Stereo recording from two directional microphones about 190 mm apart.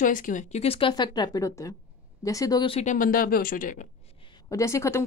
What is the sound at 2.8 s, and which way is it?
Speech, 45° left (ahead or behind).